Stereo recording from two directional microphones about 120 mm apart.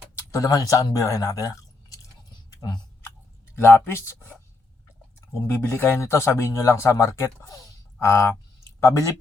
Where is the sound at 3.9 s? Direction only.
20° left (ahead or behind).